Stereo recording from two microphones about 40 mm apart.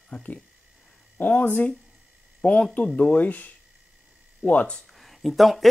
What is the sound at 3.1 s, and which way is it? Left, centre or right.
Speech, left.